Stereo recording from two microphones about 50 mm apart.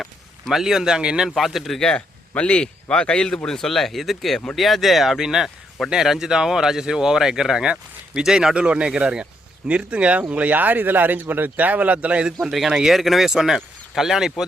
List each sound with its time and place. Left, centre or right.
0.5 s speech: centre
1.4 s speech: centre
2.0 s speech: left; by 12.3 s right
12.4 s speech: centre